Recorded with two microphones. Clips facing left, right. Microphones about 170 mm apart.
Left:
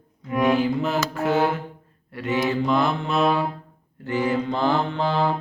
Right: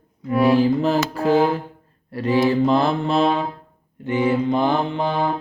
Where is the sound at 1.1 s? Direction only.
35° right (ahead or behind); by 5.3 s 15° right (ahead or behind).